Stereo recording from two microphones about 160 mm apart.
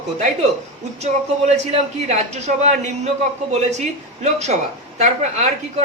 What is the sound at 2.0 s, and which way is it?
A man's voice, 45° right (ahead or behind).